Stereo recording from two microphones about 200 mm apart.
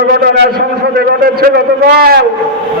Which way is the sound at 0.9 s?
50° right (ahead or behind).